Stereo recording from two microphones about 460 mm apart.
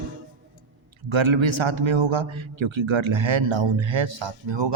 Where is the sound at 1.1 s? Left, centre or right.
Right.